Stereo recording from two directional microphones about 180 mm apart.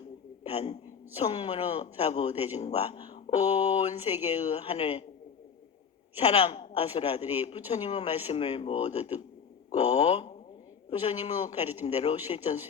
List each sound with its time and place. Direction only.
0.5 s a woman's voice: 35° left (ahead or behind)
6.1 s a woman's voice: 35° left (ahead or behind)